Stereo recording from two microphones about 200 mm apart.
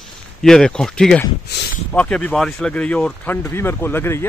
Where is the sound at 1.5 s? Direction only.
55° left (ahead or behind).